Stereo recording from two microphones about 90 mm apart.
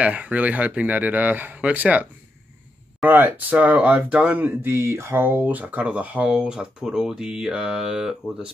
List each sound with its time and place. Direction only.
0.0 s speech: 15° right (ahead or behind)
3.1 s speech: 20° right (ahead or behind)